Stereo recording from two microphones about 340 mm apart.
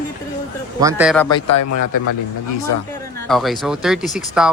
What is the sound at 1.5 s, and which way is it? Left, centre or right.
Speech, left.